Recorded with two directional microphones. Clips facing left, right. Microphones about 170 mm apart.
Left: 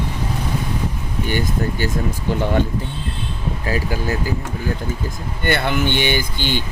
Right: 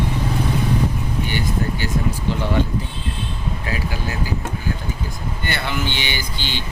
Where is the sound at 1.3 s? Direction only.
45° left (ahead or behind).